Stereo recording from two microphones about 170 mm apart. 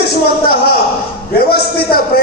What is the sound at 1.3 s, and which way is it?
Speech, 65° left (ahead or behind).